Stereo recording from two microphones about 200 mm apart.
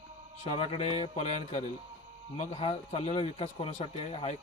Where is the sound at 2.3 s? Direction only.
30° left (ahead or behind).